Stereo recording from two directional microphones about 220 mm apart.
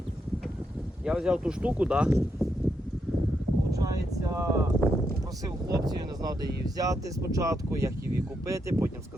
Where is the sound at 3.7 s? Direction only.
15° right (ahead or behind).